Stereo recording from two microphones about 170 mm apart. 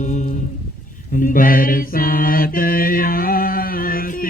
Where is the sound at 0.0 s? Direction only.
45° left (ahead or behind).